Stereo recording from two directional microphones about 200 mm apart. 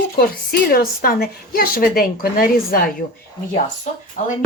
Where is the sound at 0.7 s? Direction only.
50° left (ahead or behind).